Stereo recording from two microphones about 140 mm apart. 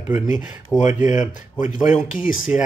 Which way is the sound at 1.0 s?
65° left (ahead or behind).